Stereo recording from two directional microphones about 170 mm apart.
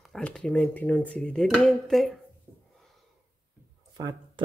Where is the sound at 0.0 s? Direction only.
5° left (ahead or behind).